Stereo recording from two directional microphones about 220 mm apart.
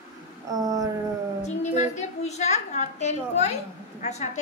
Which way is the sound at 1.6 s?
30° left (ahead or behind).